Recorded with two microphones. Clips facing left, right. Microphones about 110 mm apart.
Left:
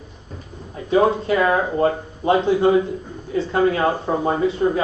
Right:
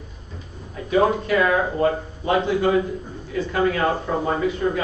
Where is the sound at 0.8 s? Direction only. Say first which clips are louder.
Left 2 dB; 30° left (ahead or behind).